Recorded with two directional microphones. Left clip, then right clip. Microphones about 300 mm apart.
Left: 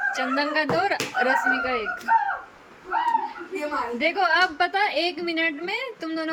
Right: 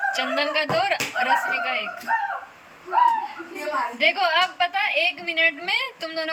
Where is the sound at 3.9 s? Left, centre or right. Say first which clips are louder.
Right 1 dB; centre.